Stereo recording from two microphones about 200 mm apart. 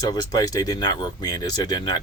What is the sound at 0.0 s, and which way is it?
Speech, 20° left (ahead or behind).